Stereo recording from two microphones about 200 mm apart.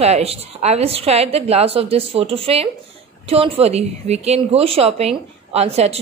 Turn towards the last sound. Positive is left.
turn(degrees=-30)  # may be behind; listen again after turning